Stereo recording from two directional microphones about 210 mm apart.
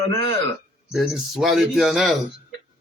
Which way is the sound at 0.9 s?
Centre (ahead or behind).